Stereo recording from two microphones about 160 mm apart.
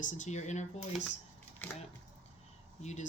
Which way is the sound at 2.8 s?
45° left (ahead or behind).